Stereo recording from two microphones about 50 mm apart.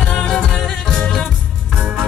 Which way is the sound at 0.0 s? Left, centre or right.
Left.